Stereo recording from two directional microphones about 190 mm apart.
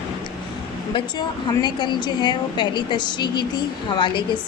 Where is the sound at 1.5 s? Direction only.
25° left (ahead or behind).